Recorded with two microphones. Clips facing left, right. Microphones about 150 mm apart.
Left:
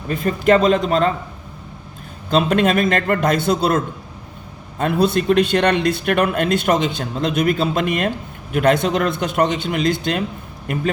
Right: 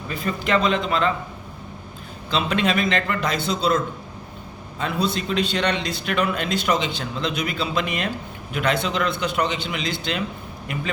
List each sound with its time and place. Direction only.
0.1 s a man's voice: 45° left (ahead or behind)
2.3 s a man's voice: 45° left (ahead or behind)